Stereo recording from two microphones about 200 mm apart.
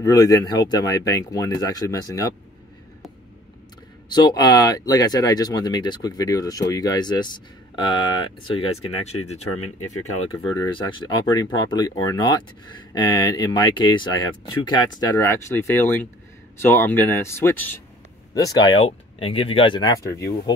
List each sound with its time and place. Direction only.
0.0 s speech: 15° left (ahead or behind)
4.1 s speech: 20° left (ahead or behind)